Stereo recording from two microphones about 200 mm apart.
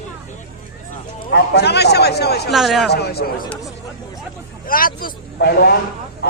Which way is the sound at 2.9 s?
55° left (ahead or behind).